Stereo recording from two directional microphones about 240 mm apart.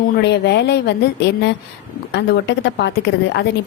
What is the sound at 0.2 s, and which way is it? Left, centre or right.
A woman's voice, left.